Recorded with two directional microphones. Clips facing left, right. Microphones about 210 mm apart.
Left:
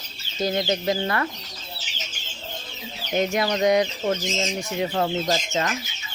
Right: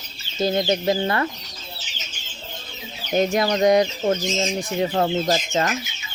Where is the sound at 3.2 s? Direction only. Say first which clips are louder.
Right 3 dB; 35° right (ahead or behind).